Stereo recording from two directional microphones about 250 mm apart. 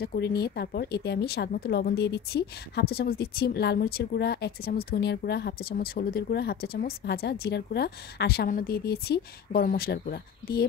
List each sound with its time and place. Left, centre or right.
0.0 s speech: left